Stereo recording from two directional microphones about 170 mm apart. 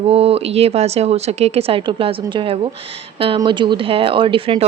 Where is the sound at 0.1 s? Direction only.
35° right (ahead or behind).